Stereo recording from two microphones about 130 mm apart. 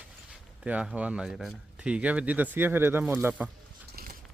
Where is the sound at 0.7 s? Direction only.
10° right (ahead or behind).